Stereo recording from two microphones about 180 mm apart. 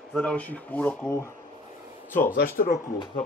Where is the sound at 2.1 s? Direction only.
45° left (ahead or behind).